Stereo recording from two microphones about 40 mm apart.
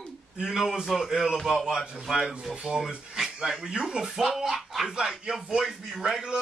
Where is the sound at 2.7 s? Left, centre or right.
Right.